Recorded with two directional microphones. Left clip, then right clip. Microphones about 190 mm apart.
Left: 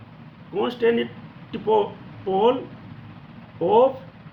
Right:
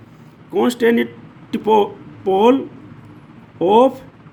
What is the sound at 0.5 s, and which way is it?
Speech, 60° right (ahead or behind).